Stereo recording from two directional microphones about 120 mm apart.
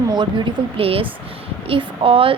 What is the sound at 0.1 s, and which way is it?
A woman's voice, 40° right (ahead or behind).